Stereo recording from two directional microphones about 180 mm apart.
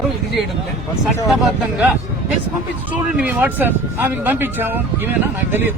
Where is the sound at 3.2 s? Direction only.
10° right (ahead or behind).